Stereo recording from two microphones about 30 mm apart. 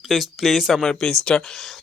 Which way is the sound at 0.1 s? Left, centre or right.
Centre.